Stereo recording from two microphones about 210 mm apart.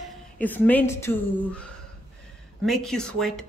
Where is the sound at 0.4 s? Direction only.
10° left (ahead or behind).